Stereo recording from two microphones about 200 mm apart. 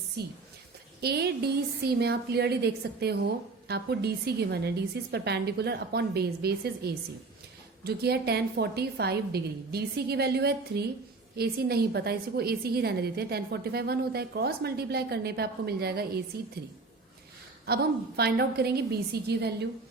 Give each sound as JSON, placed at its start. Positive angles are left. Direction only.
{"t": 1.0, "sound": "a woman's voice", "side_deg": -55}
{"t": 18.2, "sound": "a woman's voice", "side_deg": -55}